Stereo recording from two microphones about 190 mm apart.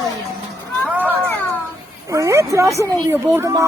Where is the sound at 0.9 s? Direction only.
10° right (ahead or behind).